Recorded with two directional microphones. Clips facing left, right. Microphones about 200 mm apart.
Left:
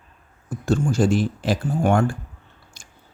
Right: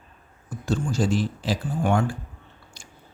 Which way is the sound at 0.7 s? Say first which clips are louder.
Left 5 dB; 50° left (ahead or behind).